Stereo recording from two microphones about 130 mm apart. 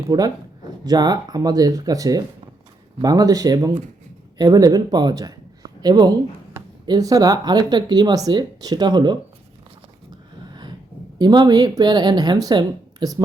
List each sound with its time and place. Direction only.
0.1 s speech: 25° right (ahead or behind)
11.2 s speech: 30° right (ahead or behind)